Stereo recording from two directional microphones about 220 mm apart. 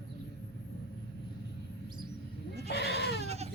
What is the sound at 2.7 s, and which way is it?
Goat, 50° left (ahead or behind).